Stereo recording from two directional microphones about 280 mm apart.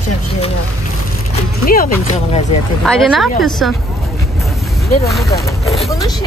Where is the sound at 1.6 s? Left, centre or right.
Left.